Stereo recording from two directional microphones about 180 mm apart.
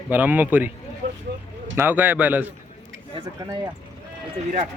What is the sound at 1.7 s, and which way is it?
Speech, 10° right (ahead or behind).